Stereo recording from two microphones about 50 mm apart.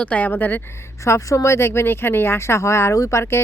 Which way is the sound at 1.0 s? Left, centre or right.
Left.